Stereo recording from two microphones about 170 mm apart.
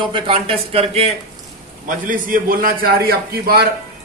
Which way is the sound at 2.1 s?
55° right (ahead or behind).